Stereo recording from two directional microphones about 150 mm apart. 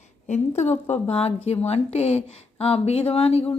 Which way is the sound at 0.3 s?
50° left (ahead or behind).